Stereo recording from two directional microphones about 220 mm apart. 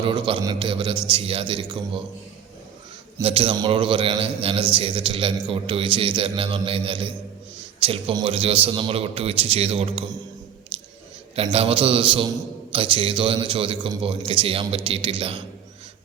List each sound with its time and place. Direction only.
0.0 s a man's voice: 20° right (ahead or behind)
3.2 s a man's voice: 25° right (ahead or behind)
11.3 s a man's voice: 25° right (ahead or behind)